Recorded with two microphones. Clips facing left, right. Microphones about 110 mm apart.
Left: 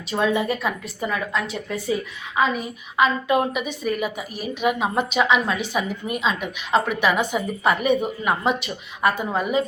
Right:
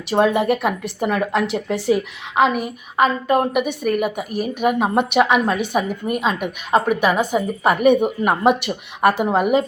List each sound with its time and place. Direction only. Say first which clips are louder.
0.1 s a woman's voice: right 5 dB; 65° right (ahead or behind)
1.3 s a woman's voice: right 6 dB; 75° right (ahead or behind)
3.0 s a woman's voice: right 3 dB; 45° right (ahead or behind); by 9.6 s 70° right (ahead or behind)